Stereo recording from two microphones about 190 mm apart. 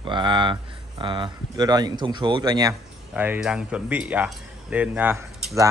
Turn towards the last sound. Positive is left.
turn(degrees=-15)  # may be behind; listen again after turning